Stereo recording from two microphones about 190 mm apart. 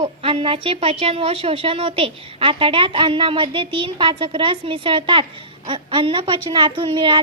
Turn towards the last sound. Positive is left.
turn(degrees=-25)  # may be behind; listen again after turning